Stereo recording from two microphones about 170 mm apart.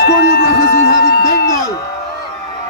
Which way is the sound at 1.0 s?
60° left (ahead or behind).